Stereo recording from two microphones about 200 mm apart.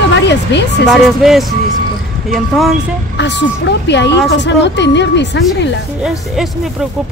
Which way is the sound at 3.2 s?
60° left (ahead or behind).